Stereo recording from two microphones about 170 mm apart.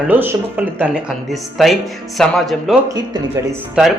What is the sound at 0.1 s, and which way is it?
Speech, 10° right (ahead or behind).